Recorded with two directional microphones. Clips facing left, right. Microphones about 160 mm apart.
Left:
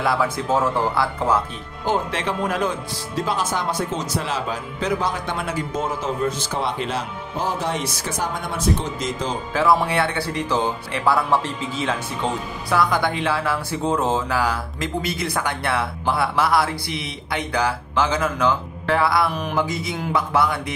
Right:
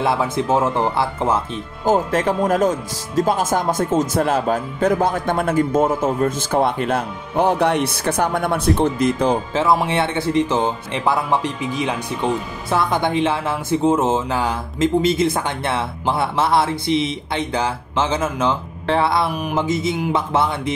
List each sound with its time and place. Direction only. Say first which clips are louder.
0.0 s speech: right 2 dB; 25° right (ahead or behind)
1.9 s speech: right 6 dB; 45° right (ahead or behind)
9.5 s speech: right 1 dB; 20° right (ahead or behind)